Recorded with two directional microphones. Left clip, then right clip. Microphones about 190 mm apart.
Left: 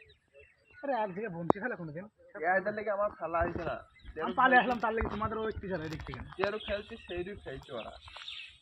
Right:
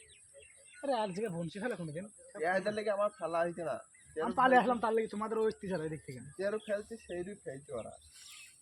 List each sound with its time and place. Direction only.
0.8 s a man's voice: 45° right (ahead or behind)